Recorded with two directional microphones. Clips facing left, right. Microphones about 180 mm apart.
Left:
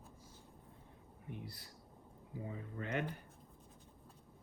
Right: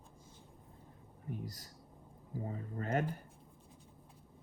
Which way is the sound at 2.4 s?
40° right (ahead or behind).